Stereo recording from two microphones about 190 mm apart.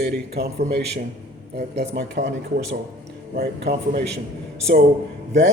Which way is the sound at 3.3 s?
50° right (ahead or behind).